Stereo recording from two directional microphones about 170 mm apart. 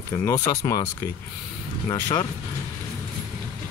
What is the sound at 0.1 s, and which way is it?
Speech, 20° left (ahead or behind).